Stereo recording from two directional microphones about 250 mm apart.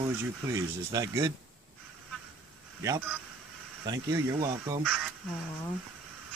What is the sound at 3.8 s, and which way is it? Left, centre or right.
Speech, centre.